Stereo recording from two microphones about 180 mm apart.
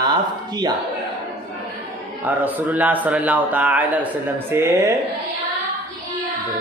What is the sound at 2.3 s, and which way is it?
A man's voice, 10° right (ahead or behind).